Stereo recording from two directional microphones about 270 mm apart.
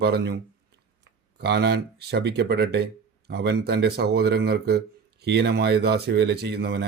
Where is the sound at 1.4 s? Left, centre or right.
Right.